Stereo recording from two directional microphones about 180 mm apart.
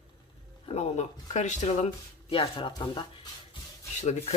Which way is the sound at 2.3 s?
30° left (ahead or behind).